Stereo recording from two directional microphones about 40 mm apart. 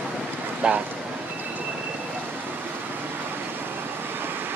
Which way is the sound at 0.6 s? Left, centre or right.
Right.